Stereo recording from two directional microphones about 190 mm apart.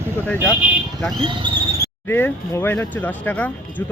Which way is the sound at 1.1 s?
25° right (ahead or behind).